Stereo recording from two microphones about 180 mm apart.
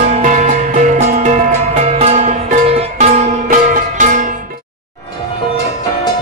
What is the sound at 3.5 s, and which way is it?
Music, 45° right (ahead or behind).